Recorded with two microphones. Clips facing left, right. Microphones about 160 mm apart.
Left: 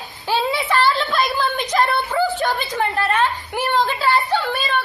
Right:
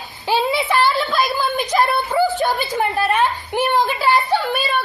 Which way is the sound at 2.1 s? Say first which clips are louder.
Right 2 dB; 15° right (ahead or behind).